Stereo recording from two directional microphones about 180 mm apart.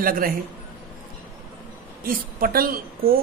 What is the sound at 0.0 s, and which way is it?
Speech, 50° right (ahead or behind).